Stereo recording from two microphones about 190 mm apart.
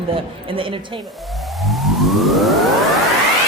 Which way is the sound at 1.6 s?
Centre (ahead or behind).